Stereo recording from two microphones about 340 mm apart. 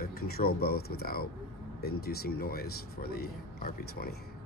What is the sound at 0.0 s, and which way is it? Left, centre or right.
Speech, left.